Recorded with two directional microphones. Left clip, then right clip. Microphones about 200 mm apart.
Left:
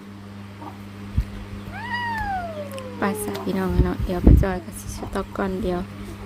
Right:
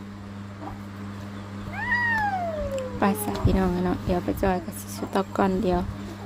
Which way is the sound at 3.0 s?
Centre (ahead or behind).